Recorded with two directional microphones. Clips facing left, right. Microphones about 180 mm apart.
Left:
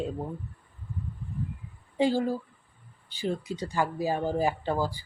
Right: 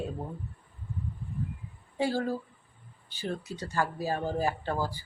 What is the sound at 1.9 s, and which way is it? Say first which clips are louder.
Speech: left 4 dB; 15° left (ahead or behind).